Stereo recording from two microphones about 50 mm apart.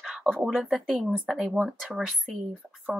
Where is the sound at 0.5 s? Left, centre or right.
Centre.